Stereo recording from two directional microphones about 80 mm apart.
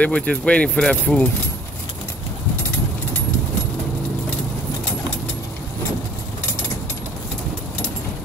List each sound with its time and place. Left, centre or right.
0.0 s speech: centre